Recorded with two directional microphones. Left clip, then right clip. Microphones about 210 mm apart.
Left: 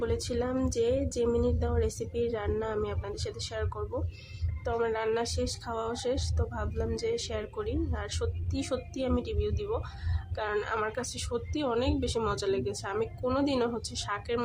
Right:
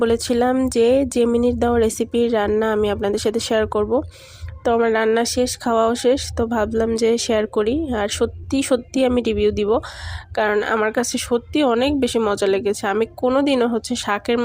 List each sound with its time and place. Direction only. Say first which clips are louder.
0.0 s a woman's voice: right 14 dB; 40° right (ahead or behind)